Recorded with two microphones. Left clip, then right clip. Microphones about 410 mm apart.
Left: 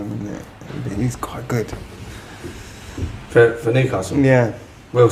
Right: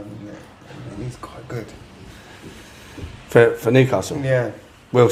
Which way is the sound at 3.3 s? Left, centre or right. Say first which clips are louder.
Even; right.